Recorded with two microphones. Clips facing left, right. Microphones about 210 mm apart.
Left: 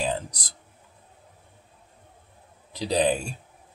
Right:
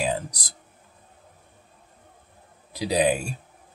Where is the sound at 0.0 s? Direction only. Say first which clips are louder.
Right 1 dB; 10° right (ahead or behind).